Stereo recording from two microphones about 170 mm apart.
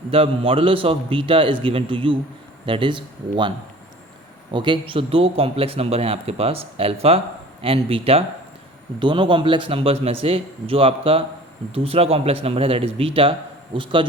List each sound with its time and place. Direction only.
0.1 s a man's voice: 30° right (ahead or behind)
4.5 s a man's voice: 25° right (ahead or behind)